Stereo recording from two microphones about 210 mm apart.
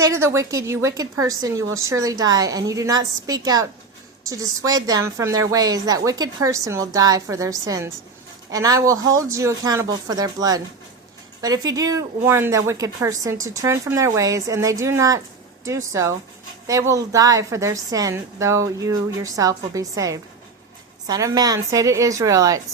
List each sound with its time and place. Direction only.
0.0 s speech: 15° right (ahead or behind)